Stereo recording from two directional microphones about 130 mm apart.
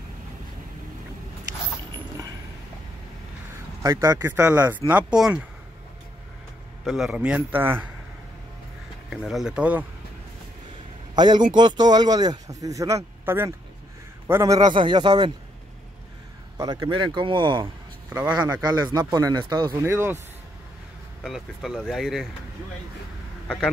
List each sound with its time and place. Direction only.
3.8 s a man's voice: 25° right (ahead or behind)
4.3 s speech: 15° right (ahead or behind)
6.8 s speech: centre (ahead or behind)
9.1 s speech: centre (ahead or behind)
11.1 s a man's voice: 35° right (ahead or behind)
16.5 s a man's voice: 25° right (ahead or behind)
16.9 s speech: 40° right (ahead or behind)
19.8 s a man's voice: 20° right (ahead or behind)
21.2 s speech: centre (ahead or behind)